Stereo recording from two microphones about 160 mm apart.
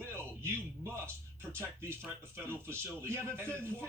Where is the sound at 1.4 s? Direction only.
15° right (ahead or behind).